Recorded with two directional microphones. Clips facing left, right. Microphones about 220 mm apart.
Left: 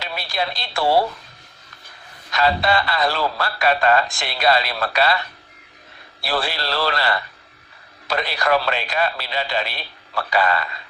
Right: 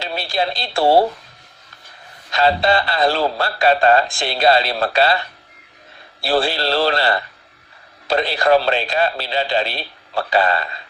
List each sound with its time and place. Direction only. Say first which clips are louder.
0.0 s speech: right 4 dB; 30° right (ahead or behind)
2.3 s speech: right 3 dB; 30° right (ahead or behind)
6.2 s speech: right 6 dB; 30° right (ahead or behind)